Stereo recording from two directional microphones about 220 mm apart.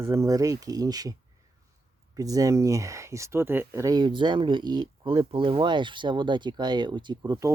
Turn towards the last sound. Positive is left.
turn(degrees=-15)  # may be behind; listen again after turning